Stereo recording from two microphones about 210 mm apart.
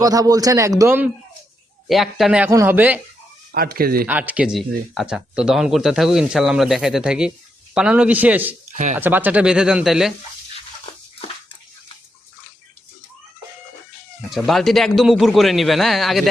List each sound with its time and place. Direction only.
0.0 s a man's voice: 15° right (ahead or behind)
3.5 s speech: 45° right (ahead or behind)
4.0 s speech: 5° right (ahead or behind)
14.3 s speech: centre (ahead or behind)